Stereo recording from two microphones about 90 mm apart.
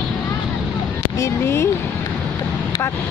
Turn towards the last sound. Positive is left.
turn(degrees=30)  # may be behind; listen again after turning